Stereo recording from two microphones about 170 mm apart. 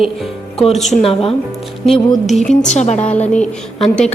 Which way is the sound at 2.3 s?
Centre (ahead or behind).